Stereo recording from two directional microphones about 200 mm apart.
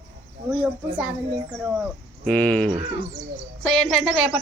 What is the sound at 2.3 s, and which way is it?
Speech, 5° left (ahead or behind).